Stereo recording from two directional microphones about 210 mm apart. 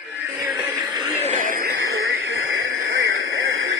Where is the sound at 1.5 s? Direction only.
55° right (ahead or behind).